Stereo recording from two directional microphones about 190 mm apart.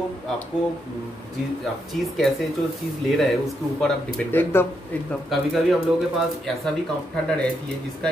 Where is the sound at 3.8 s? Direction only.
5° left (ahead or behind).